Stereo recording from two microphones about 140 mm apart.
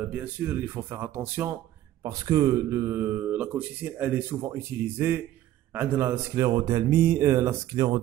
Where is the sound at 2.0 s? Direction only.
25° right (ahead or behind).